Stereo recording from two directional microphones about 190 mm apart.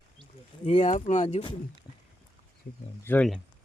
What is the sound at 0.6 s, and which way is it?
Speech, 40° left (ahead or behind).